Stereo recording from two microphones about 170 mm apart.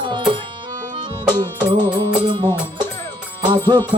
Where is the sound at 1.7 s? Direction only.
25° right (ahead or behind).